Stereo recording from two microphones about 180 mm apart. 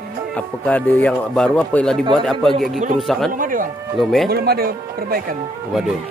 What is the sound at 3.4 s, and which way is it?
Speech, 50° right (ahead or behind).